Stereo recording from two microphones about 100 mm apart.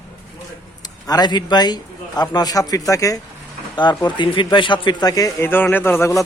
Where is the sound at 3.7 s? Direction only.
50° left (ahead or behind).